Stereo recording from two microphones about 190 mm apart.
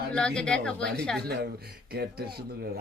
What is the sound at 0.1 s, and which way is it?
Speech, 5° left (ahead or behind).